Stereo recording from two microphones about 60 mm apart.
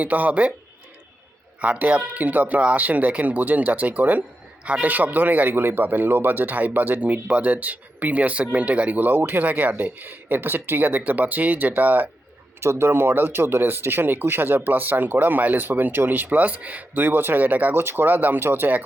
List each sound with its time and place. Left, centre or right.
0.0 s speech: right
1.6 s speech: right
12.5 s speech: right
17.7 s speech: right